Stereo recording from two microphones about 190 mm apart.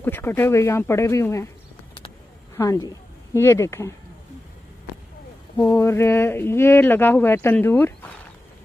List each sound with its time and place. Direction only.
0.0 s speech: 10° left (ahead or behind)
2.5 s a woman's voice: 15° left (ahead or behind)
5.6 s speech: 15° left (ahead or behind)